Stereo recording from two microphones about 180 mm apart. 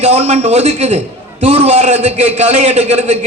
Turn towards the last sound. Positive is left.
turn(degrees=-35)  # may be behind; listen again after turning